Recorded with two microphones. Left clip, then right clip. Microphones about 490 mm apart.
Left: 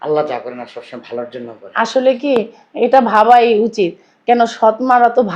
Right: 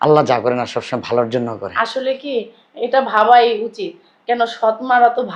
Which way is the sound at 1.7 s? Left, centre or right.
Left.